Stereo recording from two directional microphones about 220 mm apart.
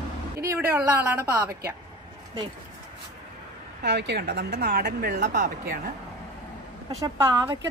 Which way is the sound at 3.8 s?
50° right (ahead or behind).